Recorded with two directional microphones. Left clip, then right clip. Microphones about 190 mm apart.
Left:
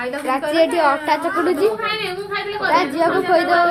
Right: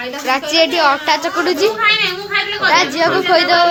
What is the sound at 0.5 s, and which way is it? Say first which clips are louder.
A woman's voice: right 3 dB; centre (ahead or behind).